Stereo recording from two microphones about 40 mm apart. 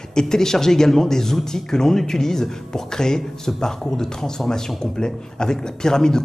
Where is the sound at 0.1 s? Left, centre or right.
Centre.